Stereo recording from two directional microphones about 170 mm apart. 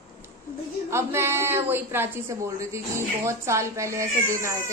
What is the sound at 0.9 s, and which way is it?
A woman's voice, 15° right (ahead or behind).